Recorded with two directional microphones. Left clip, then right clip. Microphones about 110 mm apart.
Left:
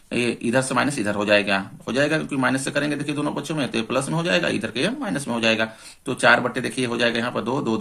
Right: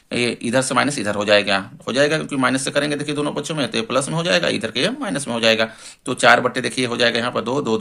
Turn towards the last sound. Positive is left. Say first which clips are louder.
# right 3 dB
turn(degrees=-30)  # may be behind; listen again after turning